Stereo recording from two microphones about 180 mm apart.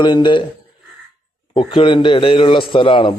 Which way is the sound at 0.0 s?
25° left (ahead or behind).